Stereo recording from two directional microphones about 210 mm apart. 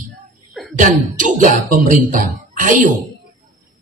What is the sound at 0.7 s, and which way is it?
A man's voice, 40° right (ahead or behind).